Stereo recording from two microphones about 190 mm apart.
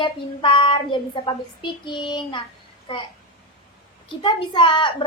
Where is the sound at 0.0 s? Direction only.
25° left (ahead or behind).